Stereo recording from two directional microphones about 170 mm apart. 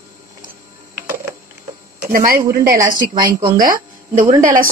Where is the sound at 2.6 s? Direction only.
55° right (ahead or behind).